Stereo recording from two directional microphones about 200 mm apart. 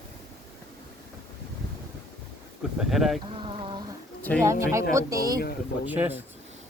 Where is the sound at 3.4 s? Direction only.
25° right (ahead or behind).